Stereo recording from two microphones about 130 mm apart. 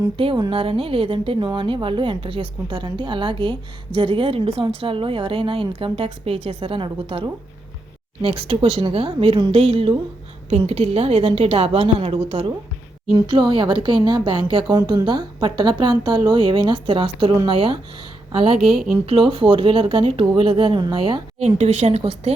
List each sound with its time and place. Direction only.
0.5 s a woman's voice: 45° right (ahead or behind)
14.8 s speech: 25° right (ahead or behind)
15.0 s a woman's voice: 40° right (ahead or behind)
18.6 s speech: centre (ahead or behind)
19.0 s a woman's voice: 45° right (ahead or behind)
21.3 s speech: 55° right (ahead or behind)